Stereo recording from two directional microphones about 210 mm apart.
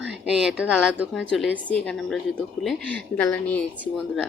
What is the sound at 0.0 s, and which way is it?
A woman's voice, 5° right (ahead or behind).